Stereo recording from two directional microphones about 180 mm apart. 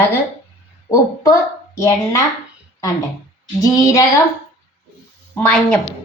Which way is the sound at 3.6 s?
20° left (ahead or behind).